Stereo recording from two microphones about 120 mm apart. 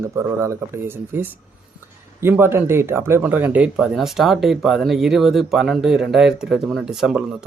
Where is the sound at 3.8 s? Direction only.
Centre (ahead or behind).